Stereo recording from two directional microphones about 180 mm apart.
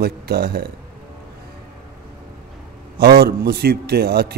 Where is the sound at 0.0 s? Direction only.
60° right (ahead or behind).